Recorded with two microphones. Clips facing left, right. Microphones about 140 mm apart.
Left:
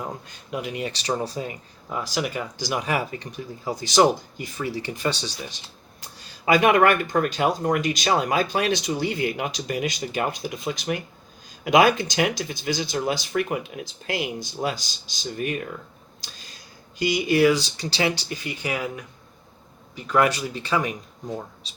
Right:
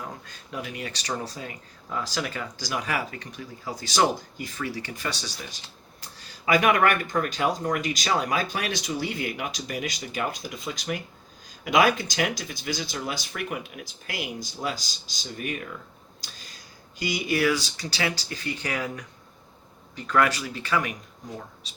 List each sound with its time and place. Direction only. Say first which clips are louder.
0.0 s speech: left 5 dB; 20° left (ahead or behind)
17.0 s speech: left 6 dB; 25° left (ahead or behind)